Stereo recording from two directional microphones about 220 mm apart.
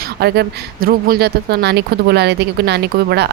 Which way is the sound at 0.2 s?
45° right (ahead or behind).